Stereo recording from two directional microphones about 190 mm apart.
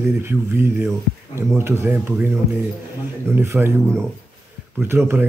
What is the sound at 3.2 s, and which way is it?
Speech, 10° right (ahead or behind).